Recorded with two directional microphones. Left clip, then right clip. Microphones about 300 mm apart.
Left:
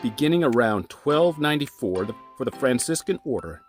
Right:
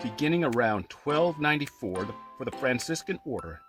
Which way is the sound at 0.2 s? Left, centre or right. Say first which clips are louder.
Left 5 dB; left.